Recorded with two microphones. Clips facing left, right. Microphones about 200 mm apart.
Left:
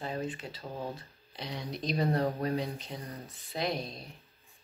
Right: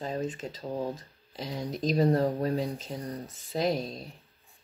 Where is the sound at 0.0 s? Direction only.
40° right (ahead or behind).